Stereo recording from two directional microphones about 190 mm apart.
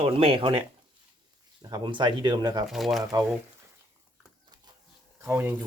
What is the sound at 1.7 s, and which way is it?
Speech, 25° right (ahead or behind).